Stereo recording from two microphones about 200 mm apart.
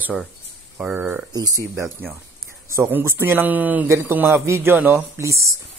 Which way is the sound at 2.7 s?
10° right (ahead or behind).